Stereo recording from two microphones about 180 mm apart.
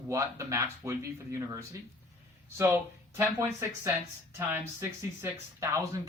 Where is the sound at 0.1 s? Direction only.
15° right (ahead or behind).